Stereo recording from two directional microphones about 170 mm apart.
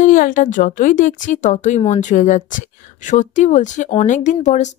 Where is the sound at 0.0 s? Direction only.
50° left (ahead or behind).